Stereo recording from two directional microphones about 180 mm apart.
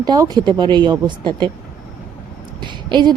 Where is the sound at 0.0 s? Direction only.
20° right (ahead or behind).